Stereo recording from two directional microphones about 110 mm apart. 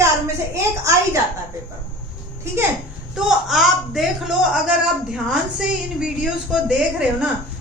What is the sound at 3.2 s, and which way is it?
A woman's voice, centre (ahead or behind).